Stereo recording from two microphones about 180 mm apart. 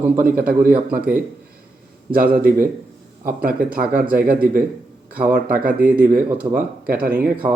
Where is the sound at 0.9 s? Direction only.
50° right (ahead or behind).